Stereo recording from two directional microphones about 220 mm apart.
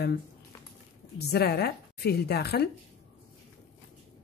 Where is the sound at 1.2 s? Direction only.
45° left (ahead or behind).